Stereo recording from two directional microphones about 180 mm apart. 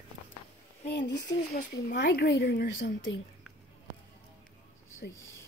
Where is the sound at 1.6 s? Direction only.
55° left (ahead or behind); by 3.2 s 75° left (ahead or behind).